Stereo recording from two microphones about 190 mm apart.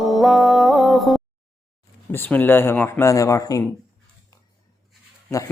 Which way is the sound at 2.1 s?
10° left (ahead or behind).